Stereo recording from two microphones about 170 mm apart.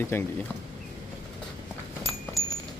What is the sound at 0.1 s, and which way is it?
Speech, 15° left (ahead or behind).